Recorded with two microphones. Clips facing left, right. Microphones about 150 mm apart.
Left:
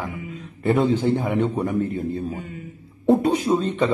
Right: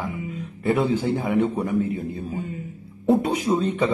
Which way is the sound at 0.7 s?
10° right (ahead or behind).